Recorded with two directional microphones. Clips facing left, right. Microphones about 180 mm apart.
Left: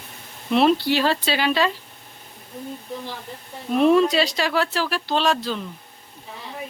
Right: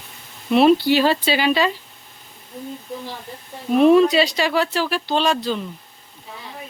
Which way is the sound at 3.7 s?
Centre (ahead or behind).